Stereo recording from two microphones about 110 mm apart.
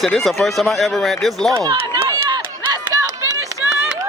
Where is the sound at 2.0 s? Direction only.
35° right (ahead or behind).